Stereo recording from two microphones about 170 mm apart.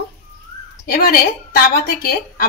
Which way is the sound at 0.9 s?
60° left (ahead or behind).